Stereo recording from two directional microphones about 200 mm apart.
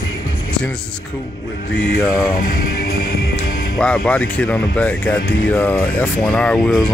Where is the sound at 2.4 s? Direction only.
50° left (ahead or behind).